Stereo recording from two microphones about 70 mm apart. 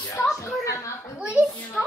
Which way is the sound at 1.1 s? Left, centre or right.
Centre.